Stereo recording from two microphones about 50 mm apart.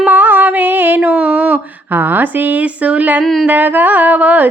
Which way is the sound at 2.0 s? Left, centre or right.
Right.